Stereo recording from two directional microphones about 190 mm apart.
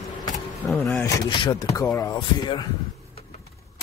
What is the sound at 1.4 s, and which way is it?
Speech, 20° left (ahead or behind).